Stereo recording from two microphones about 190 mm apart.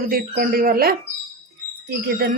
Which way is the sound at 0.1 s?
50° right (ahead or behind).